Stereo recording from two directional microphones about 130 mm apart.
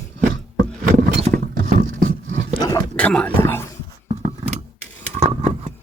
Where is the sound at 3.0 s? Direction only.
10° left (ahead or behind).